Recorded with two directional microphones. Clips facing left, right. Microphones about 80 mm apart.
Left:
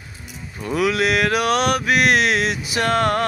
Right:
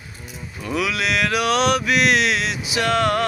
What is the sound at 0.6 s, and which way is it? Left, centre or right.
Mantra, left.